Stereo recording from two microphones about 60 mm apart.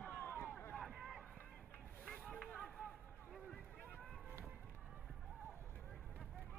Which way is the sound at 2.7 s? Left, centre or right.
Centre.